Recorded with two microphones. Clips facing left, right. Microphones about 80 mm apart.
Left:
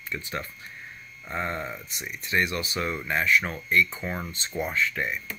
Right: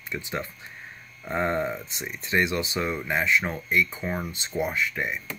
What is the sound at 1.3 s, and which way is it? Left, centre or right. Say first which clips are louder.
Speech: right 5 dB; right.